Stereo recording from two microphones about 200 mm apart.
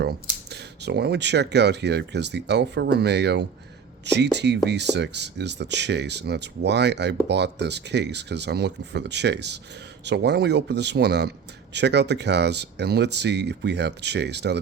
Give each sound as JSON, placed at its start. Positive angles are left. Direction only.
{"t": 0.5, "sound": "speech", "side_deg": -55}